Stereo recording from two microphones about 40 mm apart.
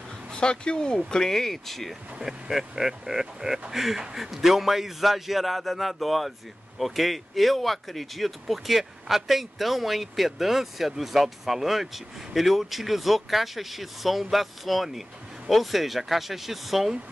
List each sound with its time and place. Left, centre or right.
0.3 s speech: left; by 2.0 s centre
2.1 s speech: centre